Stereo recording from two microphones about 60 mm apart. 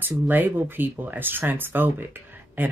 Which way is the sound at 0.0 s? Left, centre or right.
Right.